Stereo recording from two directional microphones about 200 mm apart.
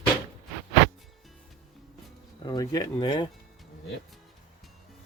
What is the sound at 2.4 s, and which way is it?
Speech, 20° left (ahead or behind).